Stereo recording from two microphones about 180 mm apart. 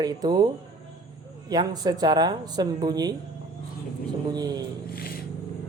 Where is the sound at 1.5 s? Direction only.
20° right (ahead or behind).